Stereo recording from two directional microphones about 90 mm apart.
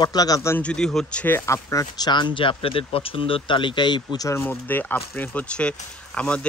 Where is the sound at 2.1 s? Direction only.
60° left (ahead or behind).